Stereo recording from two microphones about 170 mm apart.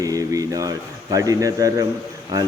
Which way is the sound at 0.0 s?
20° right (ahead or behind).